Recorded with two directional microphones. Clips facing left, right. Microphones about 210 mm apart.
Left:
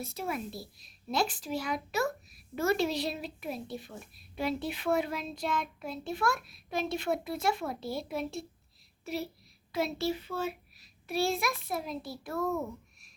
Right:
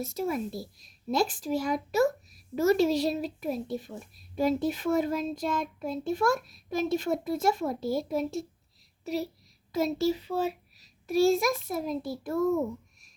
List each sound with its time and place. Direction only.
0.0 s a child's voice: 45° right (ahead or behind)
12.4 s speech: 25° right (ahead or behind)